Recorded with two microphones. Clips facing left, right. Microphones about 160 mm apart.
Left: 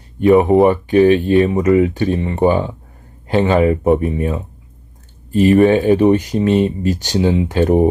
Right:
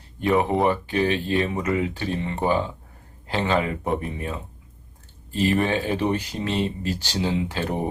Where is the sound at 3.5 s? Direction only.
50° left (ahead or behind).